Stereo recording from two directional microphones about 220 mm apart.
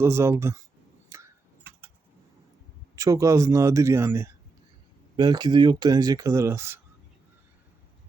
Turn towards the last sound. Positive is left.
turn(degrees=-10)  # may be behind; listen again after turning